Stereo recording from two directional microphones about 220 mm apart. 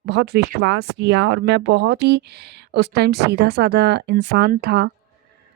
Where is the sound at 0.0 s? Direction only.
50° right (ahead or behind).